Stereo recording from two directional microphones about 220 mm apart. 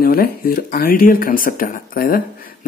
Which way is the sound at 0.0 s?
45° left (ahead or behind).